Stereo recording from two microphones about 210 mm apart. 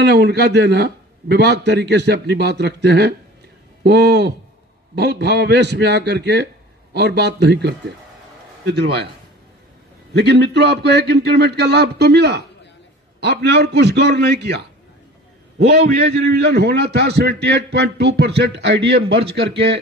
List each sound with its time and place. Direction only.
0.0 s a man's voice: 55° right (ahead or behind)
10.1 s a man's voice: 50° right (ahead or behind)
15.7 s a man's voice: 50° right (ahead or behind)